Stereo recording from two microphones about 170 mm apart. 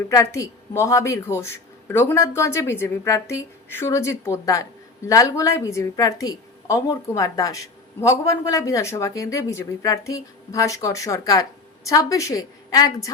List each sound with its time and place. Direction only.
0.1 s a woman's voice: 20° left (ahead or behind)